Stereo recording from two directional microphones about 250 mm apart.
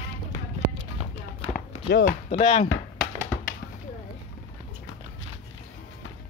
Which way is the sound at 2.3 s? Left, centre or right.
Left.